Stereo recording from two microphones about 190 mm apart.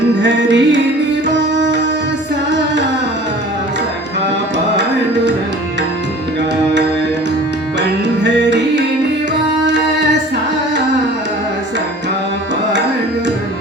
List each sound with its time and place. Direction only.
0.2 s music: 70° right (ahead or behind)
7.8 s music: 65° right (ahead or behind)